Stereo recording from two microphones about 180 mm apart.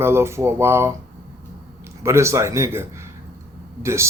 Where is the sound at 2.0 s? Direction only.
15° right (ahead or behind).